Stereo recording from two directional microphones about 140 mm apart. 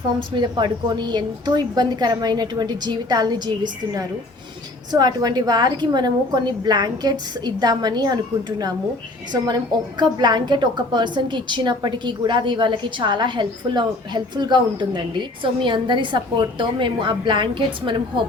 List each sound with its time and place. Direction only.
0.2 s a woman's voice: 30° right (ahead or behind)
10.0 s a woman's voice: 30° right (ahead or behind)